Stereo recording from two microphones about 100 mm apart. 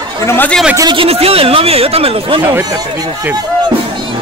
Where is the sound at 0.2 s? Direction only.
25° left (ahead or behind).